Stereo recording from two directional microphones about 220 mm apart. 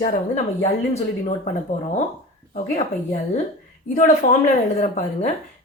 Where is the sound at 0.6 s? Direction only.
30° left (ahead or behind).